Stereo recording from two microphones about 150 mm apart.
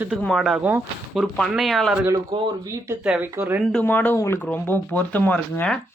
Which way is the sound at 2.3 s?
30° right (ahead or behind).